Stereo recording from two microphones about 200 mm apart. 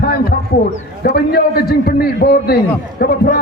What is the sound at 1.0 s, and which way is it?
A man's voice, 50° left (ahead or behind).